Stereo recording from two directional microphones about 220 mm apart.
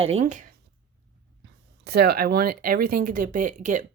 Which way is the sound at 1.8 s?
45° right (ahead or behind).